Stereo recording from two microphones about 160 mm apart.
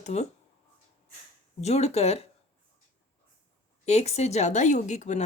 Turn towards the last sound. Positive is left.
turn(degrees=50)  # may be behind; listen again after turning